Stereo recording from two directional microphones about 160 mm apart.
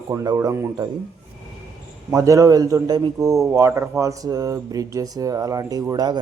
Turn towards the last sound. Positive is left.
turn(degrees=-25)  # may be behind; listen again after turning